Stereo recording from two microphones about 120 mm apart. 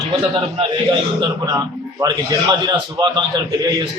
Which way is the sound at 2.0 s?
35° right (ahead or behind).